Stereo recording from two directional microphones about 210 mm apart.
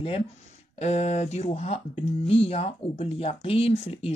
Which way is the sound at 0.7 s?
30° left (ahead or behind).